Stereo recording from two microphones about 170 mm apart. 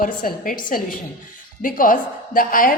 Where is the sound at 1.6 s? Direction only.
55° left (ahead or behind).